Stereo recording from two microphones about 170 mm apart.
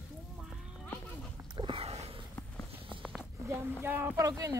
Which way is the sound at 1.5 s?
30° right (ahead or behind).